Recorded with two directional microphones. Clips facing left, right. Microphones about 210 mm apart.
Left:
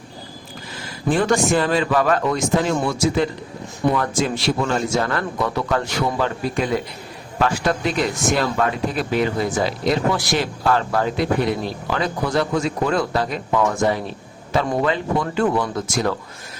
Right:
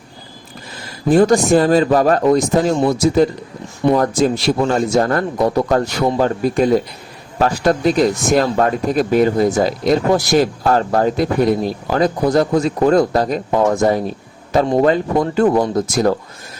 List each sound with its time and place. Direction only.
1.1 s speech: 40° right (ahead or behind)